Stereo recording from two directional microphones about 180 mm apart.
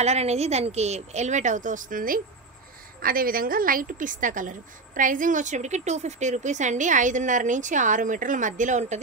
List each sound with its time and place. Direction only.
0.0 s a woman's voice: 35° right (ahead or behind)